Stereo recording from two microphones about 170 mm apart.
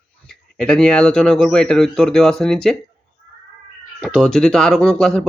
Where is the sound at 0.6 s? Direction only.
5° left (ahead or behind).